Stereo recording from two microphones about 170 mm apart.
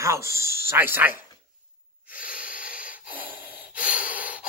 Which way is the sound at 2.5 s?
55° left (ahead or behind).